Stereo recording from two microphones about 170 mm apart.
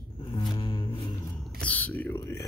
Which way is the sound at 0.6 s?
30° left (ahead or behind).